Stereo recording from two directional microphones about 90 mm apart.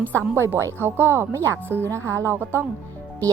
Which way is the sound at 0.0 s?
20° left (ahead or behind).